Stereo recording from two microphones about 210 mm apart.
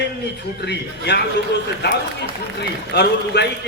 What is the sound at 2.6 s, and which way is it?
Speech, 50° left (ahead or behind).